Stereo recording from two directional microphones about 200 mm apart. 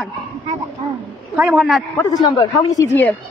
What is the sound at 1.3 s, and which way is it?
Speech, 5° right (ahead or behind).